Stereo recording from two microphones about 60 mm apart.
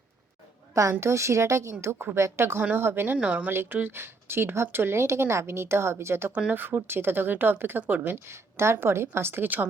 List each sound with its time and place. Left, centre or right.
0.7 s a woman's voice: right
0.9 s speech: right
3.2 s speech: right
3.5 s speech: right
8.3 s speech: right